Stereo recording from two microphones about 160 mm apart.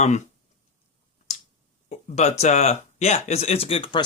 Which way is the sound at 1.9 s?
45° left (ahead or behind).